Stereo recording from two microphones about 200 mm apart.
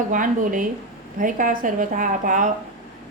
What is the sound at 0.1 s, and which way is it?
A woman's voice, 40° right (ahead or behind).